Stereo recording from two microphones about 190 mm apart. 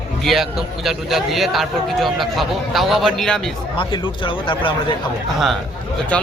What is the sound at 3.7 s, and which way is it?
A man's voice, 25° left (ahead or behind).